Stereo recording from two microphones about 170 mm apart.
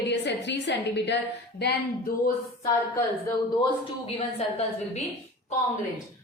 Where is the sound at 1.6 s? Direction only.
80° left.